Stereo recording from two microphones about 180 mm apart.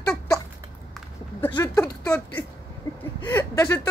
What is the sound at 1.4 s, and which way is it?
Speech, 20° left (ahead or behind).